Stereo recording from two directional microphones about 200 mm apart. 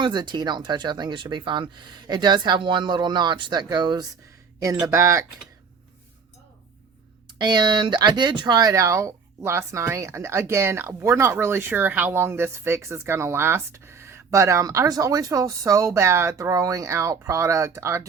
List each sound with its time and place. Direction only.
0.0 s speech: 20° right (ahead or behind)
7.3 s speech: 20° right (ahead or behind)